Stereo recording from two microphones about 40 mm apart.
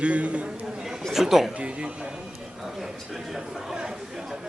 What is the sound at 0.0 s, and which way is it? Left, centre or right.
Speech, right.